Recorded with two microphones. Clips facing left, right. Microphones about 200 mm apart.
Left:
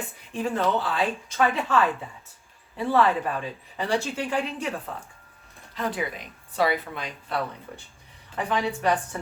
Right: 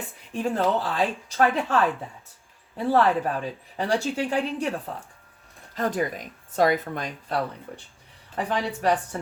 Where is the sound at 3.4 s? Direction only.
40° right (ahead or behind).